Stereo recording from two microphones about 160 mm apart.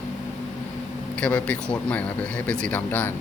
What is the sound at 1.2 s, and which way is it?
A man's voice, 10° left (ahead or behind).